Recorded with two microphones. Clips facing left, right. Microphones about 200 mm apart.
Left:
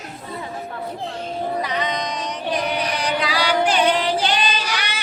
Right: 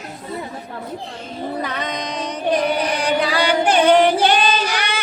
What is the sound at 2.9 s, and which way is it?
Singing, 55° right (ahead or behind).